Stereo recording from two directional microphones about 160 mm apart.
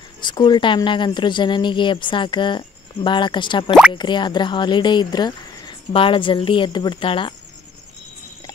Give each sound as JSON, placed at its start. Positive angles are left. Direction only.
{"t": 0.2, "sound": "speech", "side_deg": 25}